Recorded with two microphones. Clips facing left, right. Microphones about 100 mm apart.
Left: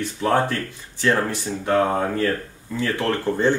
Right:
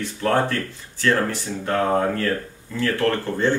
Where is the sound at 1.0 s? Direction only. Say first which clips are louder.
Even; 15° left (ahead or behind).